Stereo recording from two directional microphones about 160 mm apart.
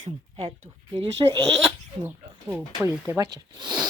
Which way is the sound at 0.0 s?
40° right (ahead or behind).